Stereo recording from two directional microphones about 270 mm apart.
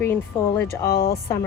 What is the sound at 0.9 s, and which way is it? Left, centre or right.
Speech, left.